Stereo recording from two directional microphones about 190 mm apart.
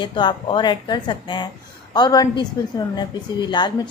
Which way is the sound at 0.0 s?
25° left (ahead or behind).